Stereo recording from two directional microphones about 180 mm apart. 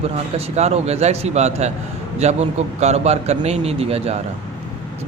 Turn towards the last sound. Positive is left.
turn(degrees=-35)  # may be behind; listen again after turning